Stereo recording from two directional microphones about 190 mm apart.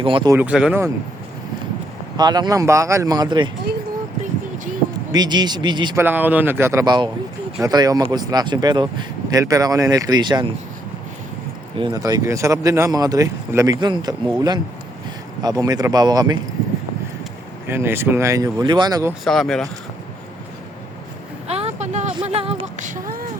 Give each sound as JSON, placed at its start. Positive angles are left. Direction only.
{"t": 0.0, "sound": "speech", "side_deg": -25}
{"t": 0.3, "sound": "speech", "side_deg": -5}
{"t": 2.1, "sound": "speech", "side_deg": -20}
{"t": 5.1, "sound": "speech", "side_deg": -20}
{"t": 6.0, "sound": "speech", "side_deg": -10}
{"t": 11.8, "sound": "speech", "side_deg": -20}
{"t": 15.4, "sound": "speech", "side_deg": -20}
{"t": 17.7, "sound": "speech", "side_deg": -10}
{"t": 19.2, "sound": "speech", "side_deg": 0}
{"t": 21.4, "sound": "a sound", "side_deg": -35}